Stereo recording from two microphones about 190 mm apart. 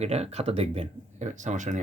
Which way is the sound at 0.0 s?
35° right (ahead or behind).